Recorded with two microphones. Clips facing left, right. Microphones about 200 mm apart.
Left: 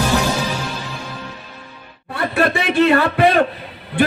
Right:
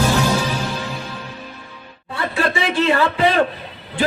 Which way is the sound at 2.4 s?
60° left (ahead or behind).